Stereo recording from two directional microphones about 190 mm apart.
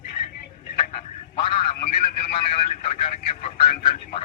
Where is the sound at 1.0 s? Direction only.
30° left (ahead or behind).